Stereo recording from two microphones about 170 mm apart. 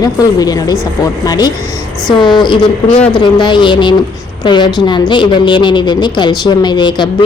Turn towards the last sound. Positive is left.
turn(degrees=25)  # may be behind; listen again after turning